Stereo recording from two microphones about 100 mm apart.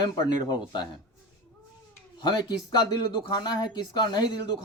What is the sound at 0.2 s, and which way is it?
Speech, 45° left (ahead or behind).